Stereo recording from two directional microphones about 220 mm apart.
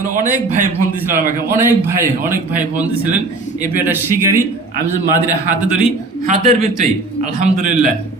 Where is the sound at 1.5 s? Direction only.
10° right (ahead or behind).